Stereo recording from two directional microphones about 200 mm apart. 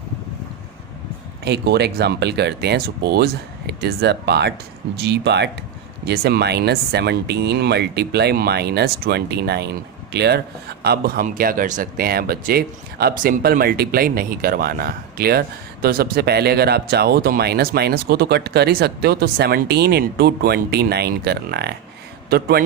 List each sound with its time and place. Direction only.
1.5 s speech: 55° right (ahead or behind)